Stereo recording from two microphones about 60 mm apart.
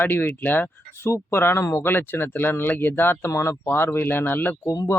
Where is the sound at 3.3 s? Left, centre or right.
Left.